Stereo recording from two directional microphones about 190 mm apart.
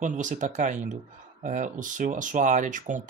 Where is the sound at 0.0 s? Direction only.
40° right (ahead or behind).